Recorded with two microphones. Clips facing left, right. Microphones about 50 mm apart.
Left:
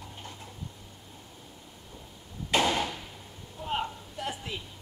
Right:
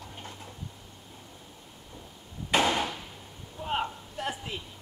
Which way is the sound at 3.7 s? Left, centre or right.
Centre.